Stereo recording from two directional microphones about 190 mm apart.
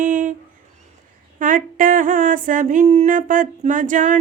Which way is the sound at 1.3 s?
45° right (ahead or behind).